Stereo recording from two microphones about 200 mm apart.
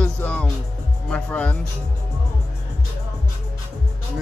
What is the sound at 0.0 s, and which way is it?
Music, 5° left (ahead or behind).